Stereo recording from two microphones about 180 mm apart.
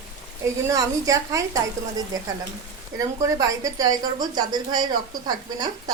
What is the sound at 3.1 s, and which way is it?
A woman's voice, 20° right (ahead or behind).